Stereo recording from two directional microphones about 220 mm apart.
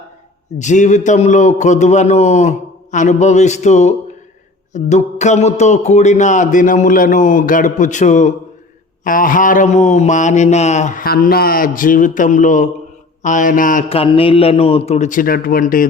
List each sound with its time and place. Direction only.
0.6 s speech: 35° left (ahead or behind)